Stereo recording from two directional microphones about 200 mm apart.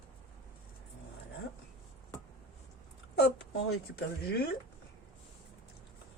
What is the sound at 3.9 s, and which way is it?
Speech, 55° left (ahead or behind).